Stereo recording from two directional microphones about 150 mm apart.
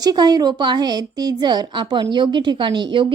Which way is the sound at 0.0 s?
25° right (ahead or behind).